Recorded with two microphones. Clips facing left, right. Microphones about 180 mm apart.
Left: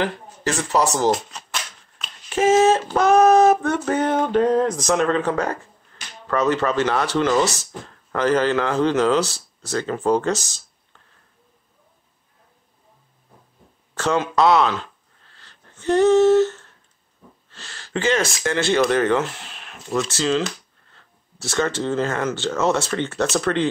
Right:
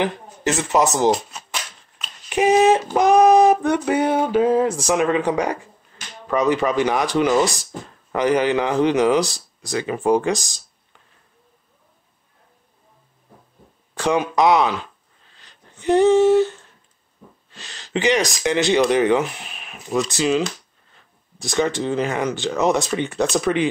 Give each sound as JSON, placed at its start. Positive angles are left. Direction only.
{"t": 0.0, "sound": "speech", "side_deg": -20}
{"t": 1.1, "sound": "shuffling cards", "side_deg": -5}
{"t": 2.2, "sound": "female singing", "side_deg": -15}
{"t": 13.9, "sound": "a sound", "side_deg": -15}
{"t": 18.4, "sound": "female singing", "side_deg": -15}
{"t": 20.9, "sound": "speech", "side_deg": -15}
{"t": 23.3, "sound": "female singing", "side_deg": -15}